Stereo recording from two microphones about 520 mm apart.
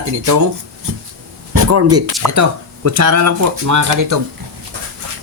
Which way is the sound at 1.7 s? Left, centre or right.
Right.